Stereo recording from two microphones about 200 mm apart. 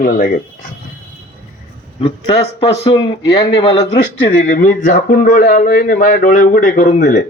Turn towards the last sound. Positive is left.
turn(degrees=40)  # may be behind; listen again after turning